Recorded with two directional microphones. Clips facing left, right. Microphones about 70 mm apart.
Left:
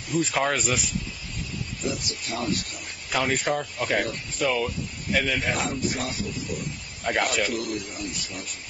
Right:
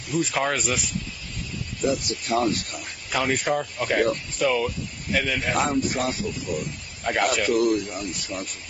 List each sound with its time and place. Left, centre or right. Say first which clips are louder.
0.1 s speech: even; centre
1.9 s speech: right 7 dB; right
3.1 s speech: right 1 dB; centre
5.7 s speech: right 4 dB; right
7.0 s speech: right 1 dB; centre
7.4 s speech: right 8 dB; right